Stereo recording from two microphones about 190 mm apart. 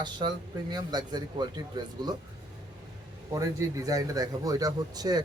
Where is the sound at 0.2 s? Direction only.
25° right (ahead or behind).